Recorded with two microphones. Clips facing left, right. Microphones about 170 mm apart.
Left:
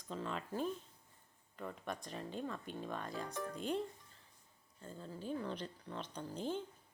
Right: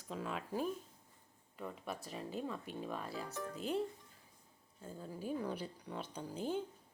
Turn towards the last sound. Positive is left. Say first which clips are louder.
# right 1 dB
turn(degrees=-10)  # may be behind; listen again after turning